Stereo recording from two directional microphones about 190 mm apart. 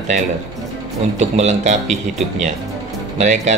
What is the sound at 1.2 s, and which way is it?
Speech, 35° right (ahead or behind).